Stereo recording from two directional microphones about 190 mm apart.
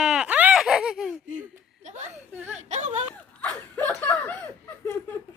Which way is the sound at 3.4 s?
10° left (ahead or behind).